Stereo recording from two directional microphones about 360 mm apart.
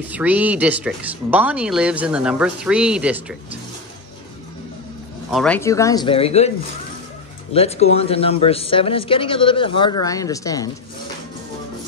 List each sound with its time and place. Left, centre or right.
0.1 s speech: centre
5.3 s speech: centre
7.5 s speech: centre